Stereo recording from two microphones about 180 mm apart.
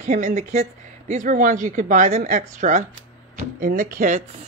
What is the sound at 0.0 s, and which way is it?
Speech, 40° right (ahead or behind).